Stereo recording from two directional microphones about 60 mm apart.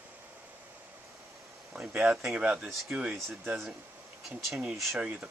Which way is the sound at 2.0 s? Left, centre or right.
Centre.